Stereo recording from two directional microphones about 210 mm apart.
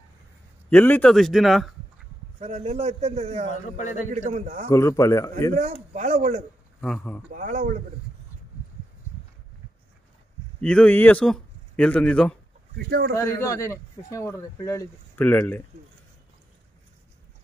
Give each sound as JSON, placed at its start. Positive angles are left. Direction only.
{"t": 0.7, "sound": "a man's voice", "side_deg": 10}
{"t": 2.4, "sound": "a man's voice", "side_deg": -30}
{"t": 3.7, "sound": "a man's voice", "side_deg": 35}
{"t": 4.1, "sound": "a man's voice", "side_deg": -35}
{"t": 4.6, "sound": "a man's voice", "side_deg": 15}
{"t": 5.5, "sound": "a man's voice", "side_deg": -35}
{"t": 6.8, "sound": "a man's voice", "side_deg": 5}
{"t": 7.2, "sound": "a man's voice", "side_deg": -35}
{"t": 10.6, "sound": "speech", "side_deg": 5}
{"t": 12.7, "sound": "speech", "side_deg": -50}
{"t": 13.2, "sound": "a man's voice", "side_deg": 15}